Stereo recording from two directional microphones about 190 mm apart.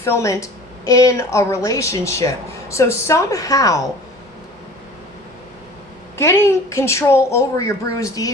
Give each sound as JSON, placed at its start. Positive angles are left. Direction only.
{"t": 0.0, "sound": "a woman's voice", "side_deg": 15}
{"t": 6.1, "sound": "a woman's voice", "side_deg": 15}